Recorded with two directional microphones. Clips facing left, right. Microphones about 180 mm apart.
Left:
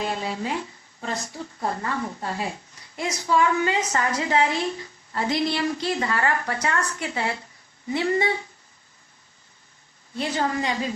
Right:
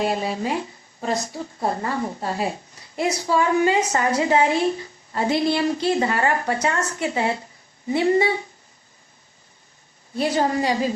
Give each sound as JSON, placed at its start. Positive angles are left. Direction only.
{"t": 0.0, "sound": "speech", "side_deg": -25}
{"t": 10.2, "sound": "a woman's voice", "side_deg": -35}